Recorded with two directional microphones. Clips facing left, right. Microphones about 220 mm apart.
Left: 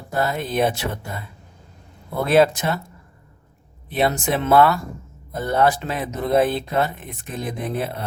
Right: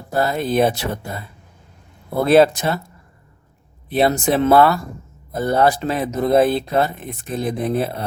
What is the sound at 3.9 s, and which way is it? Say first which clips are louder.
Speech: right 4 dB; 35° right (ahead or behind).